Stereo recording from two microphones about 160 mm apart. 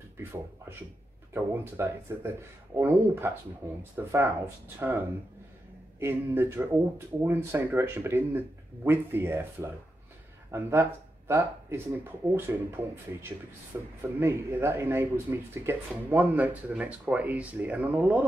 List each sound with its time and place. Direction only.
0.2 s speech: 15° right (ahead or behind)